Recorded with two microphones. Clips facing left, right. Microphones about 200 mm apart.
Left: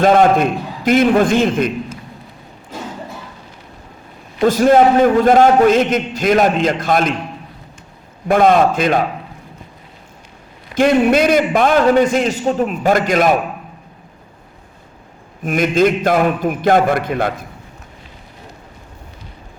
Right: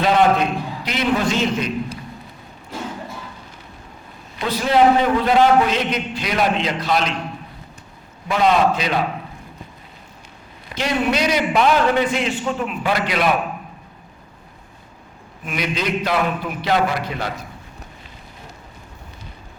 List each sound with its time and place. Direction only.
0.0 s a man's voice: 50° left (ahead or behind)
4.4 s a man's voice: 45° left (ahead or behind)
8.3 s a man's voice: 50° left (ahead or behind)
10.8 s a man's voice: 50° left (ahead or behind)
15.4 s a man's voice: 50° left (ahead or behind)